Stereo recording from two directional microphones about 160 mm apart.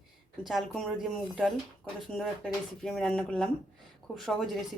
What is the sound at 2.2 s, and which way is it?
Speech, 5° left (ahead or behind).